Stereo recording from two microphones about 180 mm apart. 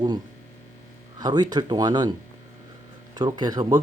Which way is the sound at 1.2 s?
20° right (ahead or behind).